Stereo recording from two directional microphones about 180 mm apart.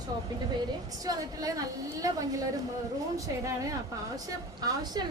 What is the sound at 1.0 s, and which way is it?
A woman's voice, 20° right (ahead or behind).